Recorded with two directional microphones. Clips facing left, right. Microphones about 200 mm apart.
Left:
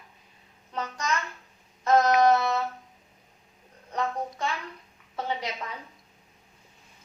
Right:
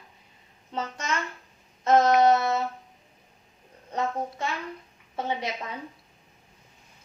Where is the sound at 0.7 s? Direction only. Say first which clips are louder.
Even; 25° right (ahead or behind).